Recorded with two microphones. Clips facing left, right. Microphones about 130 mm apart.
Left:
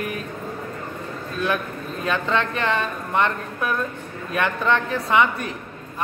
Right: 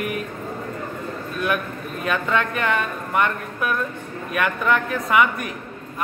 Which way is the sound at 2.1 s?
25° left (ahead or behind).